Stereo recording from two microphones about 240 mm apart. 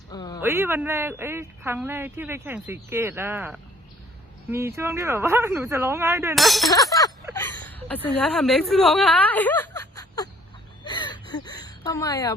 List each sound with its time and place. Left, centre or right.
0.1 s a sound: centre
0.4 s speech: centre
6.3 s speech: centre
6.7 s a sound: centre
7.3 s a woman's voice: centre
10.8 s gasp: centre